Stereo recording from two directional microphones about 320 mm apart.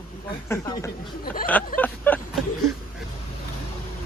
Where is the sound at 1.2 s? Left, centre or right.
Left.